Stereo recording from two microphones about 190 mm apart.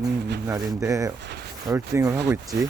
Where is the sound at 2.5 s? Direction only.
55° right (ahead or behind).